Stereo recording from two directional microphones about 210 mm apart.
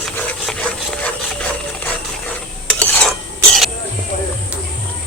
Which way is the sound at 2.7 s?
10° left (ahead or behind).